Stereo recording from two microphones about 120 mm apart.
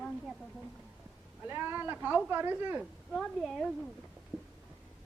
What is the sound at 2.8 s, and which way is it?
A man's voice, 5° left (ahead or behind).